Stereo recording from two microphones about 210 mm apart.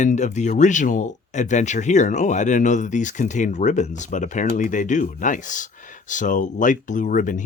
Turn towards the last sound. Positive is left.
turn(degrees=40)  # may be behind; listen again after turning